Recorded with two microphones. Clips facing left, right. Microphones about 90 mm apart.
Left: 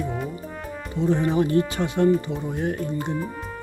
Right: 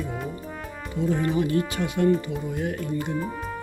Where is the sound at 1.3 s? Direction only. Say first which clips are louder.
Left 3 dB; 35° left (ahead or behind).